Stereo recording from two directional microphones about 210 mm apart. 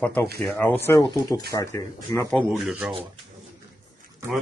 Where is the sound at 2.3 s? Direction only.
Centre (ahead or behind).